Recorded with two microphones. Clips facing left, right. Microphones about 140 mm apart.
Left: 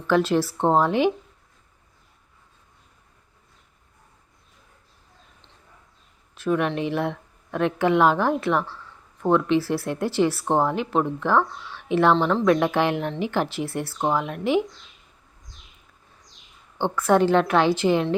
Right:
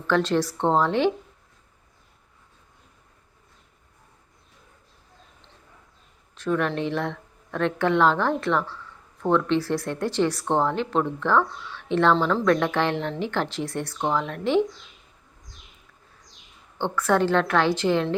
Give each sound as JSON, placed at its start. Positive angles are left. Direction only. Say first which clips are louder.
{"t": 0.1, "sound": "speech", "louder": "left 2 dB", "side_deg": 10}
{"t": 6.3, "sound": "speech", "louder": "left 1 dB", "side_deg": 10}
{"t": 16.7, "sound": "speech", "louder": "left 3 dB", "side_deg": 15}